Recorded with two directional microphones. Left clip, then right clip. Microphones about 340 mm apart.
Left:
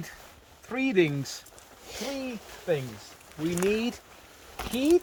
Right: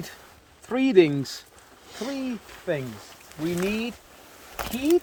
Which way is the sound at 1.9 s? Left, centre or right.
Left.